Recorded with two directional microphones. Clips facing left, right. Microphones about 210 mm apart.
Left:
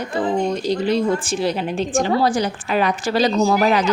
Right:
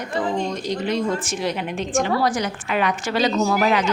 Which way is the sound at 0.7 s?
30° left (ahead or behind).